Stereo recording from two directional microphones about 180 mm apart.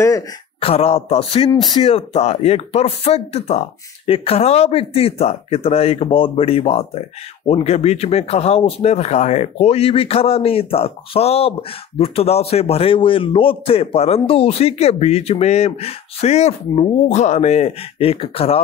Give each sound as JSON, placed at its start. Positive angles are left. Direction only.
{"t": 0.6, "sound": "a man's voice", "side_deg": 35}